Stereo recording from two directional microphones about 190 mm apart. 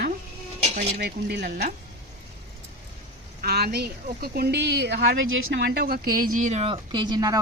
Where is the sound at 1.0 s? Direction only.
60° right (ahead or behind).